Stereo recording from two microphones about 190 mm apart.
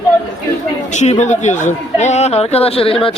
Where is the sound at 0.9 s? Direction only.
40° left (ahead or behind).